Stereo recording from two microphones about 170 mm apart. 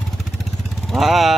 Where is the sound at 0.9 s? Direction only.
Centre (ahead or behind).